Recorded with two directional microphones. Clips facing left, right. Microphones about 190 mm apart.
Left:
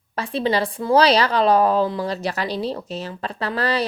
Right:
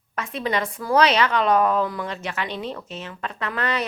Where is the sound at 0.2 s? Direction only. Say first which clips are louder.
Left 4 dB; 30° left (ahead or behind).